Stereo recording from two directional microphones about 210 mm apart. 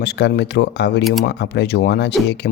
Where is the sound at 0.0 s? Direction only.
55° left (ahead or behind).